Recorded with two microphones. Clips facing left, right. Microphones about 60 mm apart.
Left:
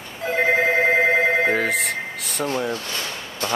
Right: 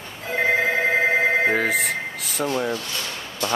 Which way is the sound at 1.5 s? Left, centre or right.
Centre.